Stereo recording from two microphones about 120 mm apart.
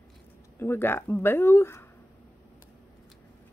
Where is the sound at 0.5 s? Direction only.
20° left (ahead or behind).